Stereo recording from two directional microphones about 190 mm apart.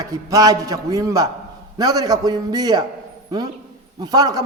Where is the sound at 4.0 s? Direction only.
20° right (ahead or behind).